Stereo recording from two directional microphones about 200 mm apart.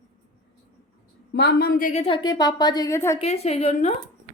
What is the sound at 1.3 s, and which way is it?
Speech, 55° left (ahead or behind).